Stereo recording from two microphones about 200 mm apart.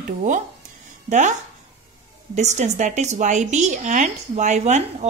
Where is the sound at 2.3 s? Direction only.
35° right (ahead or behind).